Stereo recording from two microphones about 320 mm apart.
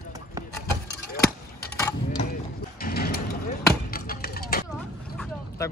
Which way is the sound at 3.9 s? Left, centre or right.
Left.